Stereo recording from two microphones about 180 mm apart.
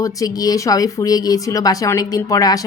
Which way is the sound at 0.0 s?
20° left (ahead or behind).